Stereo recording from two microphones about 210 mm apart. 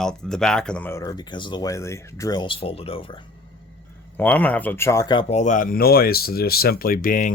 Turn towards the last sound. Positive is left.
turn(degrees=40)  # may be behind; listen again after turning